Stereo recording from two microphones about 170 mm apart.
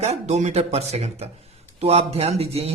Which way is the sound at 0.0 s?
40° right (ahead or behind).